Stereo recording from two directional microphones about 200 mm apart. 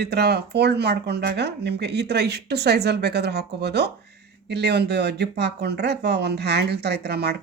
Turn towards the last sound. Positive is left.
turn(degrees=-55)  # may be behind; listen again after turning